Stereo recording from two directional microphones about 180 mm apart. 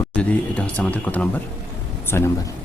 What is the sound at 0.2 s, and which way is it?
Speech, 5° left (ahead or behind).